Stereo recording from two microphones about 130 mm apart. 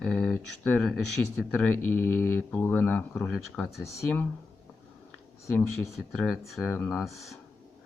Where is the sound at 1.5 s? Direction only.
15° left (ahead or behind).